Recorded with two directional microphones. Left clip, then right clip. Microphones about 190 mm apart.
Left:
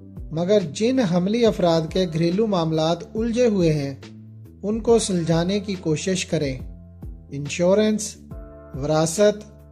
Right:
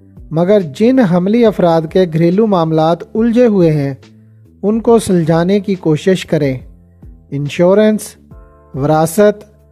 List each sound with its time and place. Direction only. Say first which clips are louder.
0.3 s speech: right 9 dB; 50° right (ahead or behind)